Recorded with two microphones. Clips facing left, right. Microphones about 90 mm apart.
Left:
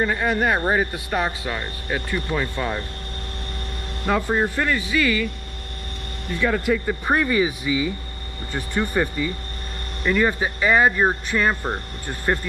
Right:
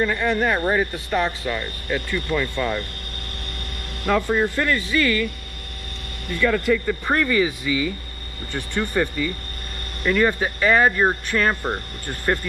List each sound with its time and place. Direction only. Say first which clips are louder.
0.0 s speech: even; 15° left (ahead or behind)
4.1 s speech: right 1 dB; 20° left (ahead or behind)
6.3 s speech: right 1 dB; 15° left (ahead or behind)
11.6 s speech: right 1 dB; centre (ahead or behind)